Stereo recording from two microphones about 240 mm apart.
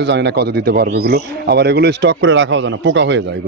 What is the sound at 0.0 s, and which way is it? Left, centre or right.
Speech, right.